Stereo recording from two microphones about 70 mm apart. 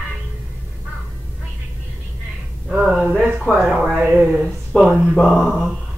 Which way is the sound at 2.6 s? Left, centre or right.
Centre.